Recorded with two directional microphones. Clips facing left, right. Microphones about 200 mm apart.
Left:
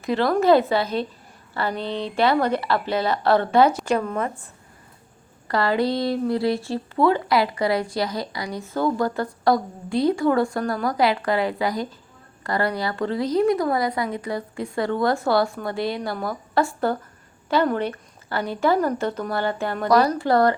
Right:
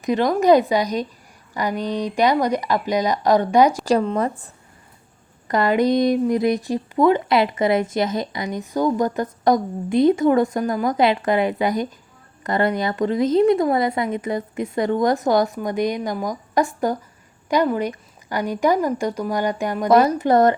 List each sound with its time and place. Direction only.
0.0 s a woman's voice: 15° right (ahead or behind)
3.8 s speech: 35° right (ahead or behind)
5.5 s a woman's voice: 20° right (ahead or behind)